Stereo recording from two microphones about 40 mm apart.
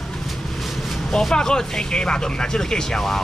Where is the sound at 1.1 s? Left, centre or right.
Centre.